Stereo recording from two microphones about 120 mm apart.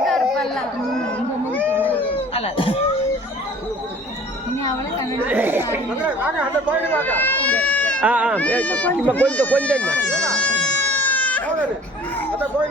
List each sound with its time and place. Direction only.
0.0 s chatter: centre (ahead or behind)
2.3 s a sound: 55° left (ahead or behind)
5.2 s a woman's voice: 15° right (ahead or behind)
6.8 s speech: 15° left (ahead or behind)
8.0 s speech: 10° right (ahead or behind)
8.4 s speech: 10° left (ahead or behind)
9.0 s goat: 10° left (ahead or behind)